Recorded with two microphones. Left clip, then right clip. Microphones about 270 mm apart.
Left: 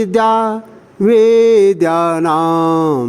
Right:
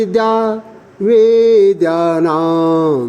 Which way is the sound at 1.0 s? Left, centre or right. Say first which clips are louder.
Even; left.